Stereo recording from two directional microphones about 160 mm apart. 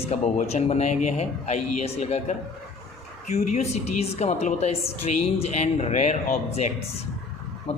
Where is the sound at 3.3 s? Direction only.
45° left (ahead or behind).